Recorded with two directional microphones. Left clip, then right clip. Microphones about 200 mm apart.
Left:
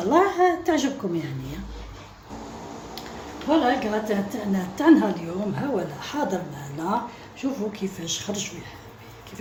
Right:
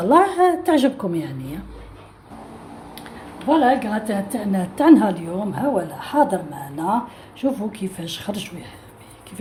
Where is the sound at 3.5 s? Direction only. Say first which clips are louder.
Right 4 dB; 60° right (ahead or behind).